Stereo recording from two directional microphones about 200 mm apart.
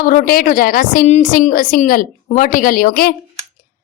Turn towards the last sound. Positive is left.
turn(degrees=50)  # may be behind; listen again after turning